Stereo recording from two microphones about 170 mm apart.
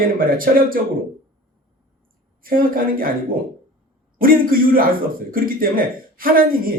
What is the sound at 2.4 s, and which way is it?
Speech, 55° right (ahead or behind).